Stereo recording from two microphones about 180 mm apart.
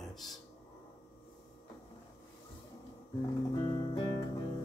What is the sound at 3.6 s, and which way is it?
Music, 25° left (ahead or behind).